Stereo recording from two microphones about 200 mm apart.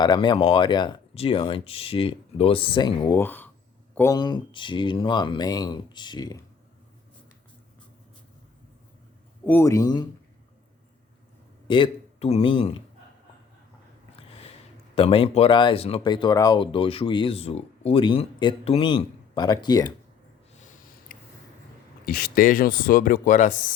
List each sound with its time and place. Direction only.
0.0 s speech: 20° left (ahead or behind)
9.5 s speech: 15° left (ahead or behind)
11.7 s a man's voice: 30° left (ahead or behind)
14.9 s speech: 25° left (ahead or behind)
21.1 s a sound: 40° left (ahead or behind)
22.0 s speech: 45° left (ahead or behind)